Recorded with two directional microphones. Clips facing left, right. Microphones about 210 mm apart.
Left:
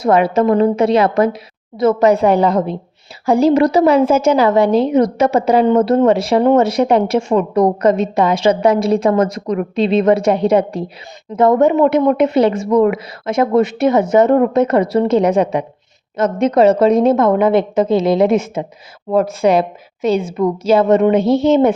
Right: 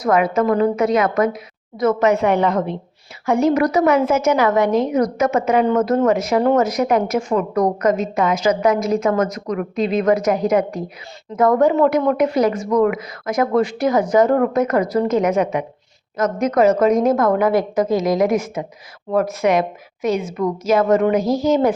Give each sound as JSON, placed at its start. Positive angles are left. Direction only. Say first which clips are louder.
{"t": 0.0, "sound": "a woman's voice", "louder": "left 4 dB", "side_deg": 30}